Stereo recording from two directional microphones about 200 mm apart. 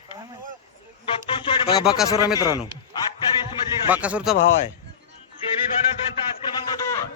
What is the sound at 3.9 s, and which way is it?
Speech, 5° right (ahead or behind).